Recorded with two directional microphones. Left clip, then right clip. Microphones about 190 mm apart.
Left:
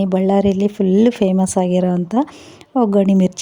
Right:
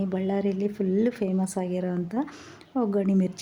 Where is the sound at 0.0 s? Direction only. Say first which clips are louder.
Left 12 dB; 40° left (ahead or behind).